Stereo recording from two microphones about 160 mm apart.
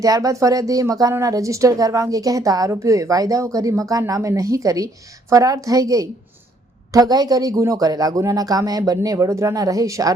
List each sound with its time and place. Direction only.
0.0 s speech: 20° right (ahead or behind)